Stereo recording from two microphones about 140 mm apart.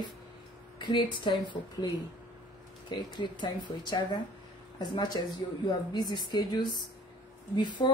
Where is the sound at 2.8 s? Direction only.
35° left (ahead or behind).